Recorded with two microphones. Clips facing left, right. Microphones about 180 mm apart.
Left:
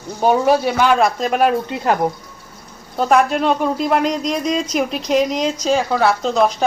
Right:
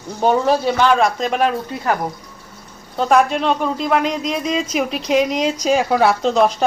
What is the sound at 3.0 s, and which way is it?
Speech, centre (ahead or behind).